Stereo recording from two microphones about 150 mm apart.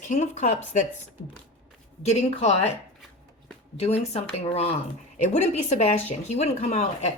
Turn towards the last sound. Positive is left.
turn(degrees=45)  # may be behind; listen again after turning